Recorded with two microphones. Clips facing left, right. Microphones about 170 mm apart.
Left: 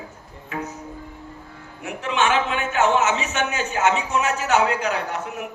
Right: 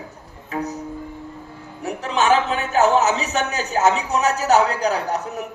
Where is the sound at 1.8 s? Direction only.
40° right (ahead or behind).